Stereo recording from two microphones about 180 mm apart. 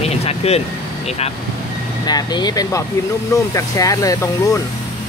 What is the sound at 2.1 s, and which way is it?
Speech, 20° left (ahead or behind).